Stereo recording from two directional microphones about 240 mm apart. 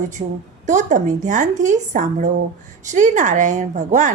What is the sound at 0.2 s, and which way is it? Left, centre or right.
A woman's voice, right.